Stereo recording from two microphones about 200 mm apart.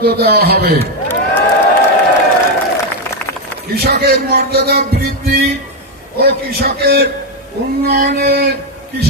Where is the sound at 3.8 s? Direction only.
50° right (ahead or behind).